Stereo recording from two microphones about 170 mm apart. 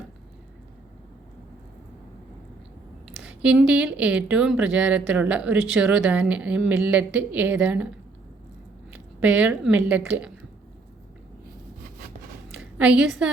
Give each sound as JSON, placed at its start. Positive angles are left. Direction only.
{"t": 3.1, "sound": "speech", "side_deg": -5}
{"t": 12.5, "sound": "a woman's voice", "side_deg": -5}